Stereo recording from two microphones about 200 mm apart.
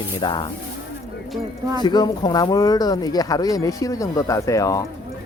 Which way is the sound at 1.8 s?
20° left (ahead or behind).